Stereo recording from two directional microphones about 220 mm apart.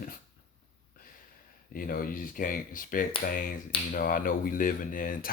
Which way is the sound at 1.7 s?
40° left (ahead or behind).